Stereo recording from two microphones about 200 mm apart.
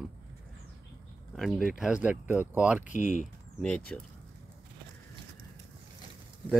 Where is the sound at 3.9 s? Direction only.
5° left (ahead or behind).